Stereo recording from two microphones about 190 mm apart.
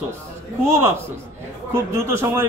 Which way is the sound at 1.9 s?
15° right (ahead or behind).